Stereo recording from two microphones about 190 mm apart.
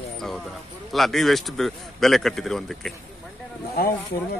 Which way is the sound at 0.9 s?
Centre (ahead or behind).